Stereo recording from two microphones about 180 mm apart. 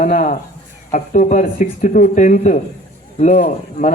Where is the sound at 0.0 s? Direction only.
45° left (ahead or behind).